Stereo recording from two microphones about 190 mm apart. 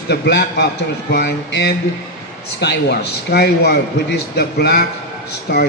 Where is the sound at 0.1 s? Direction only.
60° left (ahead or behind).